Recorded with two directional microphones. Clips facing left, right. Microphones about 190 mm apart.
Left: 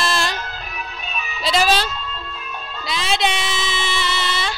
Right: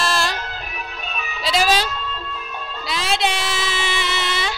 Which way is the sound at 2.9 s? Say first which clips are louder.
Left 1 dB; 5° right (ahead or behind).